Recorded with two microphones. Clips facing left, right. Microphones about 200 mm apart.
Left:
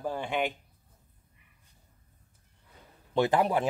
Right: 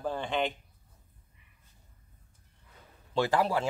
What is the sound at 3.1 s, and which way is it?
Speech, 20° left (ahead or behind).